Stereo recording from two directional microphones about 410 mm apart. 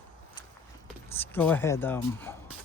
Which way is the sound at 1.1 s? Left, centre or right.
Centre.